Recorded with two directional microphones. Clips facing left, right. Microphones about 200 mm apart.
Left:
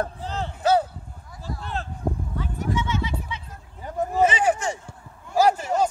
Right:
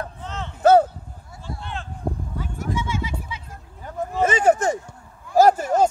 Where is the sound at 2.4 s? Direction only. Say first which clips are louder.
Left 1 dB; 10° right (ahead or behind).